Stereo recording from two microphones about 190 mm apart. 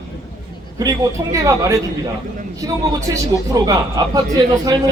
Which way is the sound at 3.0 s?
15° right (ahead or behind).